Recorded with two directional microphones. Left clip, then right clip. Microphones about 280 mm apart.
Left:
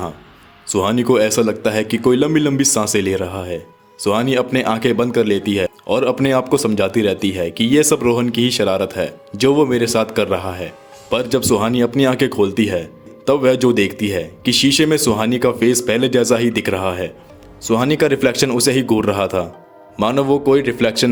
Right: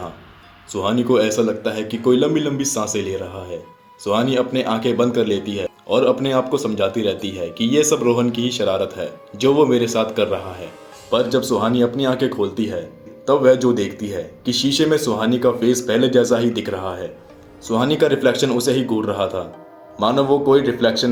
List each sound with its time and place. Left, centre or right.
0.7 s a man's voice: left